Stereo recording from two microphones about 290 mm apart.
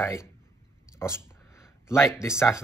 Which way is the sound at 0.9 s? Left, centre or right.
Centre.